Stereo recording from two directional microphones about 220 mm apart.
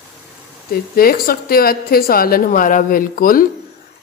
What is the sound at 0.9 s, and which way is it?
A woman's voice, 40° left (ahead or behind).